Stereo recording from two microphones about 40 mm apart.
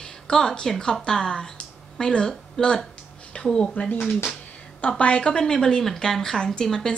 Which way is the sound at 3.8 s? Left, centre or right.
Left.